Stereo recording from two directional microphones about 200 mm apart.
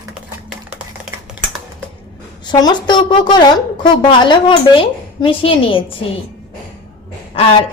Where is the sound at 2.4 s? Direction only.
20° left (ahead or behind).